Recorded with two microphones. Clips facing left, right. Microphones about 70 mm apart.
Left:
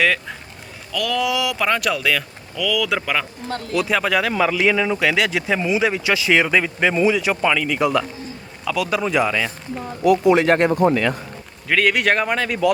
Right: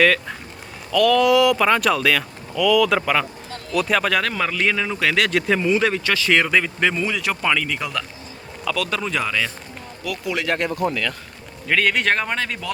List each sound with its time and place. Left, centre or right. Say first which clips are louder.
0.0 s speech: right 2 dB; centre
10.0 s speech: left 12 dB; left
11.7 s speech: left 2 dB; centre